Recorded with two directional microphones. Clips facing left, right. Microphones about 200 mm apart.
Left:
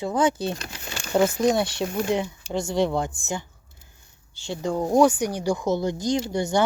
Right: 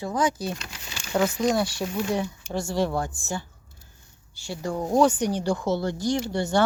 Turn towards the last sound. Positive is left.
turn(degrees=15)  # may be behind; listen again after turning